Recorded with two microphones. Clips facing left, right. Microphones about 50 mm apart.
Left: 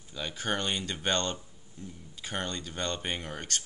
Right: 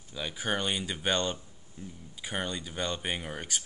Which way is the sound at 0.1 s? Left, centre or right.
Centre.